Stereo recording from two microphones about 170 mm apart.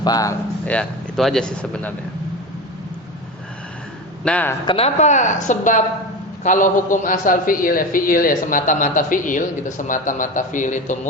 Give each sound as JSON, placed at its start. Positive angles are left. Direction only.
{"t": 0.0, "sound": "speech", "side_deg": 20}
{"t": 0.6, "sound": "a man's voice", "side_deg": 5}
{"t": 4.2, "sound": "speech", "side_deg": 10}
{"t": 4.6, "sound": "speech", "side_deg": 30}
{"t": 4.9, "sound": "a man's voice", "side_deg": 45}